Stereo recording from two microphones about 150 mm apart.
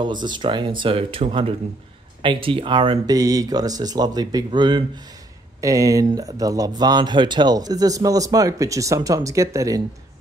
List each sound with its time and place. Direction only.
0.0 s speech: 30° right (ahead or behind)
3.1 s speech: 25° right (ahead or behind)